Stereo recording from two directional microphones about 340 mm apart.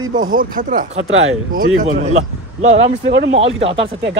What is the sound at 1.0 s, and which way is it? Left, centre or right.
Speech, right.